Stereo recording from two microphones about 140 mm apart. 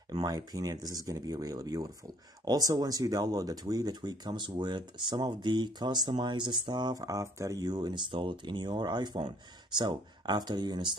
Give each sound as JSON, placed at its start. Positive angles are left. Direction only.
{"t": 0.1, "sound": "speech", "side_deg": -30}